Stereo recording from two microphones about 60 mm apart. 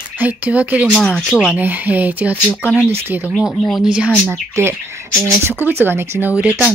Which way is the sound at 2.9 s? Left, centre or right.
Right.